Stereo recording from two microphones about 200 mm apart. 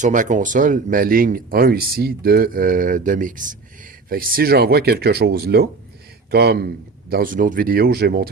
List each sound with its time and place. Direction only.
0.0 s speech: 40° right (ahead or behind)